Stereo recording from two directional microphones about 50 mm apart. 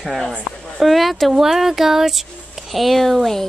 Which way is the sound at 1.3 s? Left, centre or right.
Centre.